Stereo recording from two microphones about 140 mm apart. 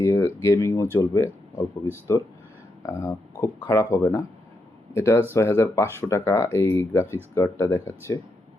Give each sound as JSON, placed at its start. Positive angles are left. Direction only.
{"t": 0.0, "sound": "speech", "side_deg": 20}